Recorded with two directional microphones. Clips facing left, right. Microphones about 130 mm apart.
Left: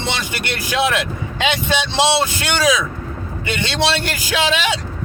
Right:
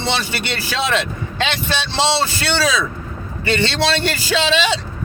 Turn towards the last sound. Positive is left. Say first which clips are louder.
# right 1 dB
turn(degrees=10)  # may be behind; listen again after turning